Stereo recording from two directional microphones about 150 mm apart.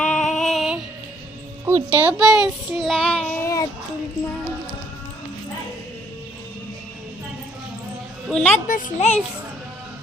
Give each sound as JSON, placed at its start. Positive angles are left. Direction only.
{"t": 0.0, "sound": "music", "side_deg": 5}
{"t": 1.6, "sound": "a child's voice", "side_deg": -15}
{"t": 8.3, "sound": "a woman's voice", "side_deg": 5}
{"t": 8.5, "sound": "speech", "side_deg": 55}